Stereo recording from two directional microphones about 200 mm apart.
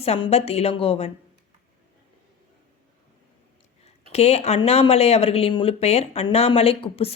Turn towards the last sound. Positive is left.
turn(degrees=30)  # may be behind; listen again after turning